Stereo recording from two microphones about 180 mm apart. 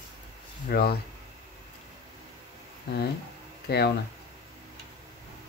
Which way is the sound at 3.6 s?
65° left (ahead or behind).